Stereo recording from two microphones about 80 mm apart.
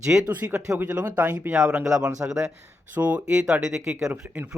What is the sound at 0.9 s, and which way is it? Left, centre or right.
Speech, centre.